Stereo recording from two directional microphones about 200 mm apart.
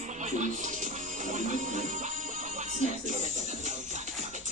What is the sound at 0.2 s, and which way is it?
Music, 35° right (ahead or behind).